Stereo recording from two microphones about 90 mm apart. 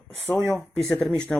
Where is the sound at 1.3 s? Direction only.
10° left (ahead or behind).